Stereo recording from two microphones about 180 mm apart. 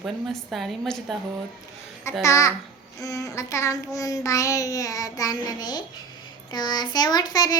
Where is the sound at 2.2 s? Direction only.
15° left (ahead or behind).